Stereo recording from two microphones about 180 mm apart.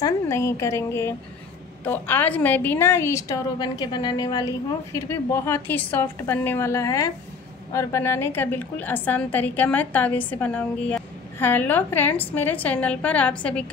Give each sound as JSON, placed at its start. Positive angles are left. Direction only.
{"t": 0.0, "sound": "a woman's voice", "side_deg": 15}